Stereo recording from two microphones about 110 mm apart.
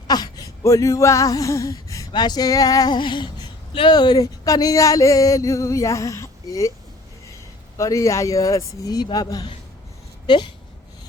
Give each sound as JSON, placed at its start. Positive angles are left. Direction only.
{"t": 0.1, "sound": "a sound", "side_deg": 35}
{"t": 3.7, "sound": "speech", "side_deg": 50}
{"t": 7.8, "sound": "speech", "side_deg": 30}